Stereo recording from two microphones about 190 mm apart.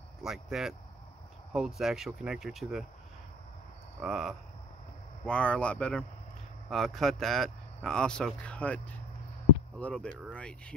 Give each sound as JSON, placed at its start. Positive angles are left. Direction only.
{"t": 0.2, "sound": "speech", "side_deg": 0}
{"t": 4.0, "sound": "speech", "side_deg": -5}
{"t": 5.2, "sound": "speech", "side_deg": 5}